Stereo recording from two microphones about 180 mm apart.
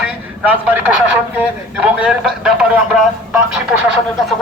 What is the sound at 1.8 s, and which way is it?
Speech, 5° right (ahead or behind).